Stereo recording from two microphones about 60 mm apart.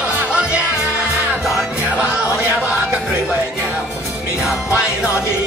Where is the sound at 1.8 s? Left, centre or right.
Right.